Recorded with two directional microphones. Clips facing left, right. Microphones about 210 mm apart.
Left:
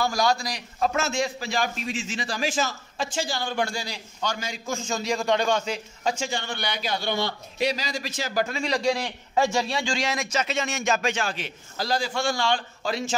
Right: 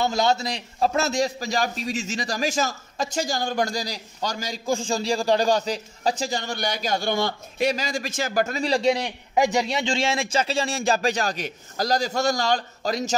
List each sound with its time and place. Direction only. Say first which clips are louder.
0.0 s a man's voice: right 2 dB; 25° right (ahead or behind); by 13.1 s 40° right (ahead or behind)